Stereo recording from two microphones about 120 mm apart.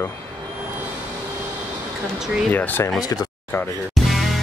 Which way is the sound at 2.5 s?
15° left (ahead or behind).